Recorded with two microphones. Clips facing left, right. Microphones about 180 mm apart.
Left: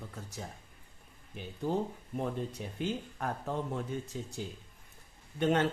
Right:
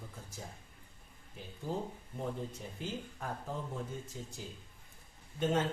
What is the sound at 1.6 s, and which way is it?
Speech, 70° left (ahead or behind).